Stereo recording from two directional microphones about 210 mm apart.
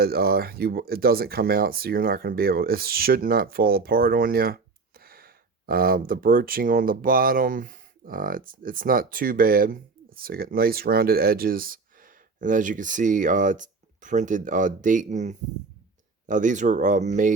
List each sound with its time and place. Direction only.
0.0 s speech: 45° right (ahead or behind)